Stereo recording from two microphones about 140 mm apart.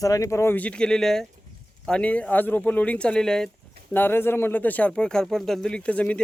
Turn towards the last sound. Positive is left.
turn(degrees=10)  # may be behind; listen again after turning